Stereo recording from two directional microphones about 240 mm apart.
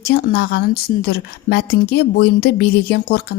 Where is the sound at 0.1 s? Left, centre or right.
Left.